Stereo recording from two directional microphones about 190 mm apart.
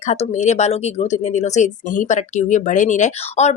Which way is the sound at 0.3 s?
35° left (ahead or behind).